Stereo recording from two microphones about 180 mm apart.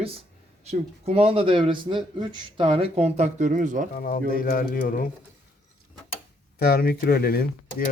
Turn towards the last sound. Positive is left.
turn(degrees=60)  # may be behind; listen again after turning